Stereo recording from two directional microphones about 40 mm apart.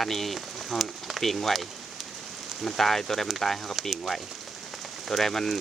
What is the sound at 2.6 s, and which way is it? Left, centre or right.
Speech, centre.